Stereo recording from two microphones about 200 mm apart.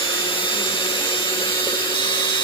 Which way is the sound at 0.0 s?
25° left (ahead or behind).